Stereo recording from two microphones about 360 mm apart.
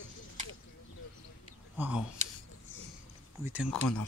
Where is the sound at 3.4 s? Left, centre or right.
Centre.